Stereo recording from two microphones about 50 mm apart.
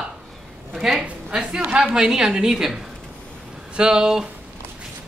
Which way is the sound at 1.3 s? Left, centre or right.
Centre.